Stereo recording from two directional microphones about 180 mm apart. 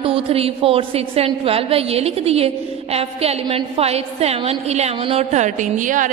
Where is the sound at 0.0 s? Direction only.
30° right (ahead or behind).